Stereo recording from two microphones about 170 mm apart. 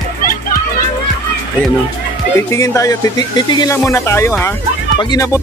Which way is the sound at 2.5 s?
15° left (ahead or behind).